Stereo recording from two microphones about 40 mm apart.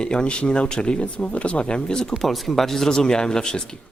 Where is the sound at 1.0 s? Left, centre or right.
Left.